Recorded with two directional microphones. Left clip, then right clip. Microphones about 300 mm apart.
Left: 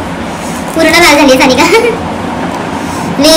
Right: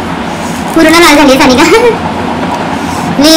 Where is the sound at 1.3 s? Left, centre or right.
Centre.